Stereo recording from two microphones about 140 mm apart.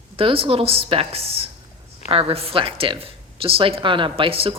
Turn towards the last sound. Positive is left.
turn(degrees=-40)  # may be behind; listen again after turning